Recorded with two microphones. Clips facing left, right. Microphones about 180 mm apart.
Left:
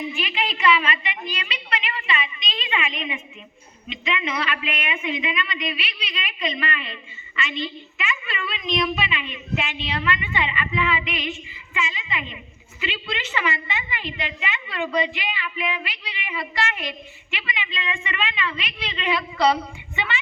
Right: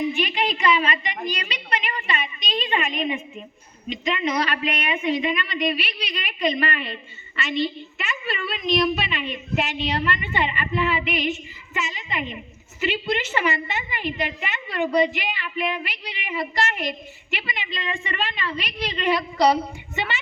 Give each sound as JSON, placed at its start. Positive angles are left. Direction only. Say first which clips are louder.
{"t": 0.1, "sound": "a woman's voice", "louder": "right 4 dB", "side_deg": -40}